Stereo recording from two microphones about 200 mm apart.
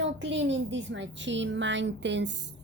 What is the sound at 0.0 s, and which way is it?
A woman's voice, 65° right (ahead or behind).